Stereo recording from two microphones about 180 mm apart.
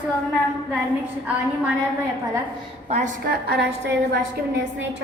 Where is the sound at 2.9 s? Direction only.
45° right (ahead or behind).